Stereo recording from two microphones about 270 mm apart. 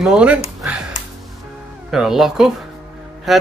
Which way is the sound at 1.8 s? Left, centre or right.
Centre.